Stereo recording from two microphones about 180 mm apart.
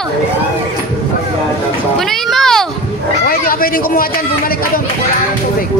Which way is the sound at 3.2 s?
55° left (ahead or behind).